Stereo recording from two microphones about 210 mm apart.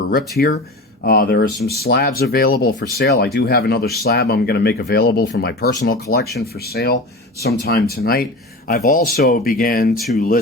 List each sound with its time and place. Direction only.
0.1 s speech: 45° left (ahead or behind)